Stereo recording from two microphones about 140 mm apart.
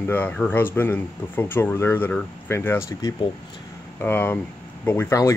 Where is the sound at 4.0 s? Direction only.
15° left (ahead or behind).